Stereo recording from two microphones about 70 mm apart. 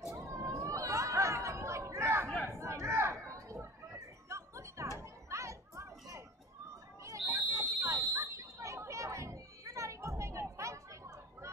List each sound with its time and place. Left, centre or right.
0.1 s chatter: right
4.3 s music: right
5.0 s children playing: right
7.0 s a sound: right
7.8 s chatter: right